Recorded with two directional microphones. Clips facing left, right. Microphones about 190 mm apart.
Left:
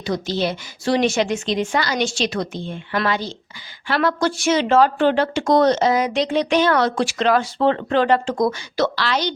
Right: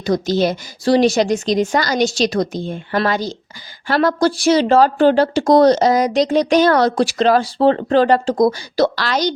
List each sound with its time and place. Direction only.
0.0 s speech: 45° right (ahead or behind)